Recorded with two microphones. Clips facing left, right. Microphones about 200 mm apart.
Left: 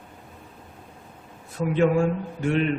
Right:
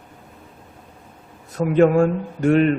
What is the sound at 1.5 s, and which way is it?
Speech, 45° right (ahead or behind).